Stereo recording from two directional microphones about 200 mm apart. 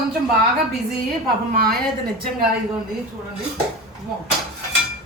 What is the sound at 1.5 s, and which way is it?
Speech, 50° right (ahead or behind).